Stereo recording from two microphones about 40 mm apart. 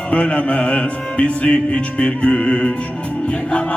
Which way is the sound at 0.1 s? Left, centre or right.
Left.